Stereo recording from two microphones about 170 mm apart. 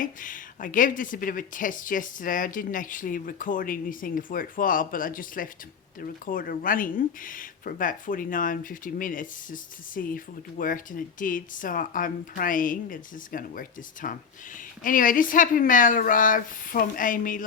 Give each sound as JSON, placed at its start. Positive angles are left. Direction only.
{"t": 0.0, "sound": "speech", "side_deg": 50}